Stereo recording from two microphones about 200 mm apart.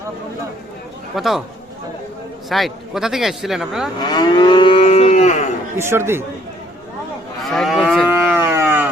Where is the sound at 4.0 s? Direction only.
20° left (ahead or behind).